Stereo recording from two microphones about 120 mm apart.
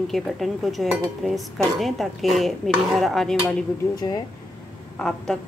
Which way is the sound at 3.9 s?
35° left (ahead or behind).